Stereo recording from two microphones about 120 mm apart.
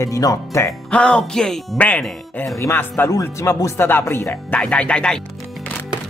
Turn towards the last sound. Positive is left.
turn(degrees=10)  # may be behind; listen again after turning